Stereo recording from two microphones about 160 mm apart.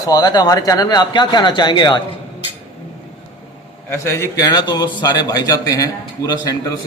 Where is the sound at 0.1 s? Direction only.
25° left (ahead or behind).